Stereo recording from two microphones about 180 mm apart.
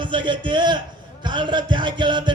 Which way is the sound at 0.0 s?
25° right (ahead or behind).